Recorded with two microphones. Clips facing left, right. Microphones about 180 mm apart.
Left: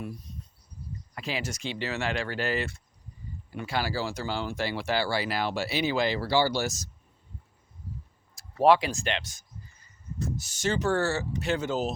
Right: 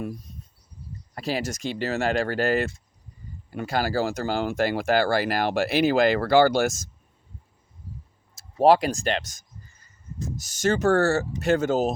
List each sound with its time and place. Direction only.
1.1 s speech: 40° right (ahead or behind)
8.6 s speech: 40° right (ahead or behind)